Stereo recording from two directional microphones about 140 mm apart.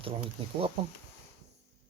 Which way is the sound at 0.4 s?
40° right (ahead or behind).